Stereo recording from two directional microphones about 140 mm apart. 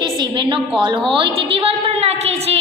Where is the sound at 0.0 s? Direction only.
35° right (ahead or behind).